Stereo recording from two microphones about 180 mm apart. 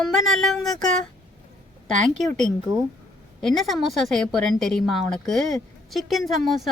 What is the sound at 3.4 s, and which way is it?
Speech, centre (ahead or behind).